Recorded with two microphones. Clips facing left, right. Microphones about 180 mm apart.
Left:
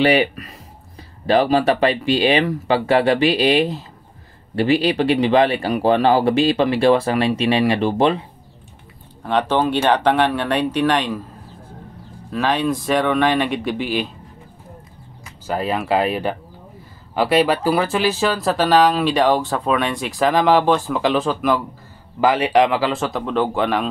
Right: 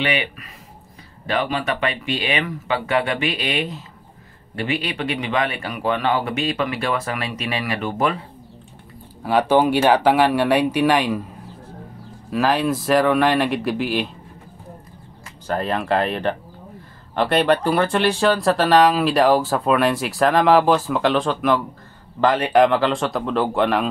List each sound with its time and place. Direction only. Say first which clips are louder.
0.0 s speech: left 8 dB; 35° left (ahead or behind)
9.2 s speech: right 2 dB; 10° right (ahead or behind)
12.3 s speech: even; 5° right (ahead or behind)
15.4 s speech: left 1 dB; 5° left (ahead or behind)